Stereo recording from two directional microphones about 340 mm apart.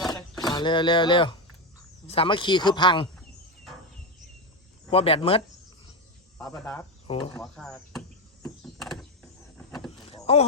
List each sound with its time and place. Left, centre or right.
0.1 s a sound: centre
2.0 s speech: centre
4.9 s speech: centre
6.4 s speech: centre
7.4 s door: centre
10.1 s vehicle: centre